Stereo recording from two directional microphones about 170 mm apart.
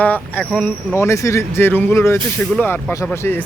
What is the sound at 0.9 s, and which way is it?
Speech, 15° left (ahead or behind).